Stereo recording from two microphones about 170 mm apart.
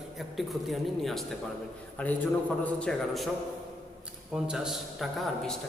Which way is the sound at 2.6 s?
5° left (ahead or behind).